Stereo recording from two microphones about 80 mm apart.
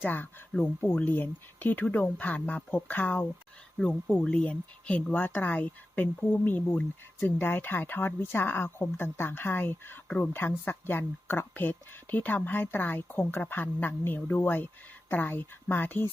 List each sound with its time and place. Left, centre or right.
0.0 s speech: left
3.8 s speech: centre